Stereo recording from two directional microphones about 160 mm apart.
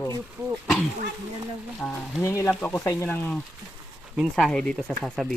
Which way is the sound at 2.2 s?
15° left (ahead or behind).